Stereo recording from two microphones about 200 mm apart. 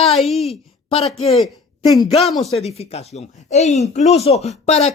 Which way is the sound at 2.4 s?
30° left (ahead or behind).